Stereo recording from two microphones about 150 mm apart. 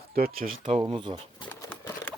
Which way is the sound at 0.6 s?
40° right (ahead or behind).